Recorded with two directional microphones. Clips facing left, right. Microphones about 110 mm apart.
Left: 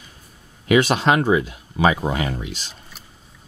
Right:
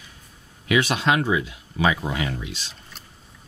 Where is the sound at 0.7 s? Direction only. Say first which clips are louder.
Left 4 dB; 40° left (ahead or behind).